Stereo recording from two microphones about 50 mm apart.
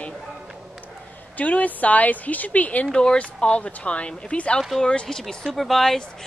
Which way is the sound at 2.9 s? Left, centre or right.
Centre.